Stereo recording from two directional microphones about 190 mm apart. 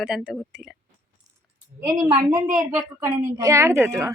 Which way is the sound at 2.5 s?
15° right (ahead or behind).